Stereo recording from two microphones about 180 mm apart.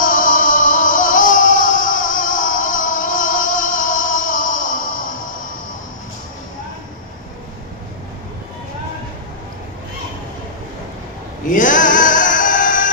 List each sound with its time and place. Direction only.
0.0 s music: 50° left (ahead or behind)
11.4 s music: 45° left (ahead or behind)